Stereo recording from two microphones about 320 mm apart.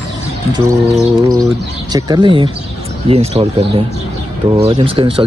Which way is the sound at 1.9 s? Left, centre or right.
Centre.